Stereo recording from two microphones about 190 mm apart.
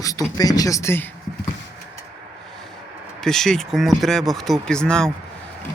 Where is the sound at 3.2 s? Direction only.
Centre (ahead or behind).